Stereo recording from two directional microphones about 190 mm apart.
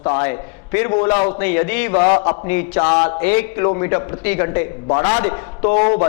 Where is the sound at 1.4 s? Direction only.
15° left (ahead or behind).